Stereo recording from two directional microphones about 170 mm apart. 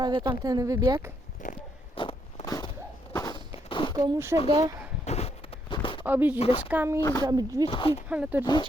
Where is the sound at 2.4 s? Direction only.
20° left (ahead or behind).